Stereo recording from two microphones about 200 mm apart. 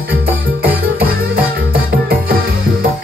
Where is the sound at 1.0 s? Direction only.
45° right (ahead or behind).